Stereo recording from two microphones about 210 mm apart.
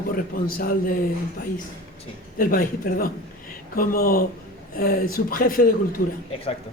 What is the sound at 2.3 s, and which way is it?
A man's voice, 40° left (ahead or behind).